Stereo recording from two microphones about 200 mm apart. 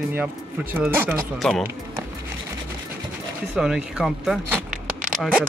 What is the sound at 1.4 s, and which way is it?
Speech, centre (ahead or behind).